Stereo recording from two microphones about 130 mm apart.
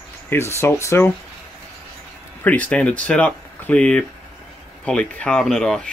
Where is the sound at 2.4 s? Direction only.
10° left (ahead or behind).